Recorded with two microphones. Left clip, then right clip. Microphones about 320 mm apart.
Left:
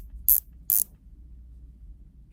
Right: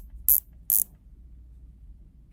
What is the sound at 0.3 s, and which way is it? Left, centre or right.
Mechanisms, centre.